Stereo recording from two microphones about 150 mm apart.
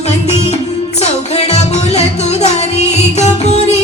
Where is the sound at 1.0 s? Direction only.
45° left (ahead or behind).